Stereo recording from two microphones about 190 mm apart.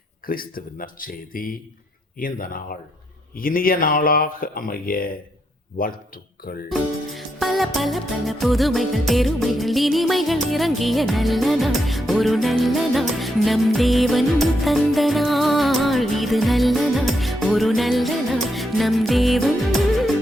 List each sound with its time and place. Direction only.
0.3 s speech: 50° left (ahead or behind)
6.7 s music: centre (ahead or behind)